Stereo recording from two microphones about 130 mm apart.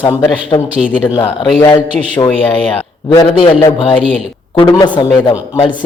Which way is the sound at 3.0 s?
35° left (ahead or behind).